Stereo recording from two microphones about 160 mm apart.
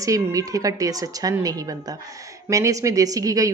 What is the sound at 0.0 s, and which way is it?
Speech, 20° right (ahead or behind).